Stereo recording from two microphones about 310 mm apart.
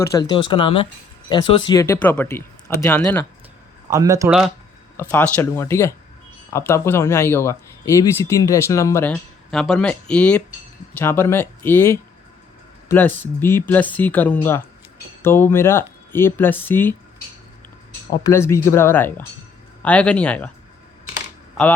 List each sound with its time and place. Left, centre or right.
0.0 s speech: centre
3.8 s speech: centre
18.2 s speech: centre